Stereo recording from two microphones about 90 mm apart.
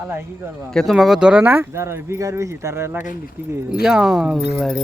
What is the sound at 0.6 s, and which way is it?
Speech, 5° left (ahead or behind).